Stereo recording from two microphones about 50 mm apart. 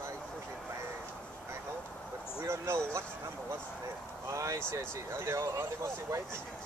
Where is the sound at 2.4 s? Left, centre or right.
Right.